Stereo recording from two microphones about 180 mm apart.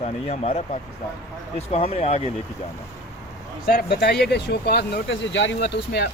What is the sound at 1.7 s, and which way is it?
Speech, 35° left (ahead or behind).